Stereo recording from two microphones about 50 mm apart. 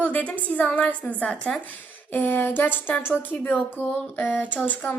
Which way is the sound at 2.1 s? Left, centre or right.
Left.